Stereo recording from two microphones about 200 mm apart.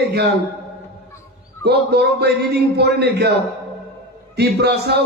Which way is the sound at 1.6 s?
55° right (ahead or behind).